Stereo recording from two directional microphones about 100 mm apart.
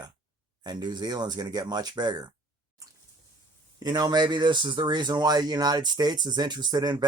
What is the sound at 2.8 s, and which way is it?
Drip, 35° right (ahead or behind).